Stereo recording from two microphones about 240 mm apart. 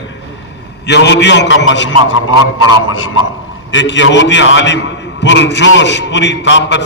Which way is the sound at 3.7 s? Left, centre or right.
Left.